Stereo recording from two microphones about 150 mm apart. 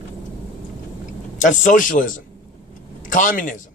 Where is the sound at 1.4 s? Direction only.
55° left (ahead or behind).